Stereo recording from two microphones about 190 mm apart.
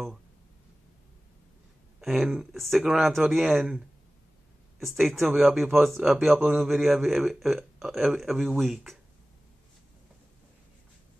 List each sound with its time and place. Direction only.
2.0 s speech: centre (ahead or behind)